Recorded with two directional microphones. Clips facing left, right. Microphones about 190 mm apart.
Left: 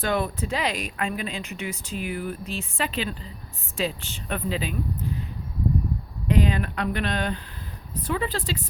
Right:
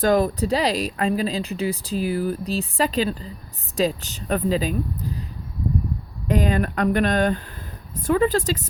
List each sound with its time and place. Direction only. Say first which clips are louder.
0.0 s speech: right 7 dB; 40° right (ahead or behind)
6.2 s speech: right 2 dB; 45° right (ahead or behind)